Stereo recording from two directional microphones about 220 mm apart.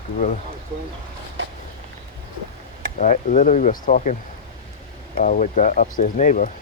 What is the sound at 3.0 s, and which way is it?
Speech, 35° left (ahead or behind).